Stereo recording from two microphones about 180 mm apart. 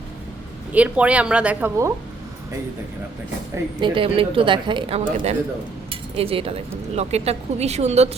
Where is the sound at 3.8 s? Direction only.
30° right (ahead or behind).